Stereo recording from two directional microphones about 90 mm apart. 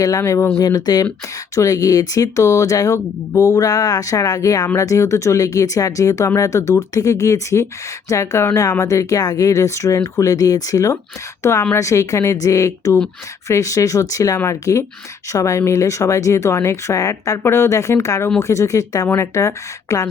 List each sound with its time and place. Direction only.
0.0 s speech: 40° left (ahead or behind)
0.6 s speech: 45° left (ahead or behind)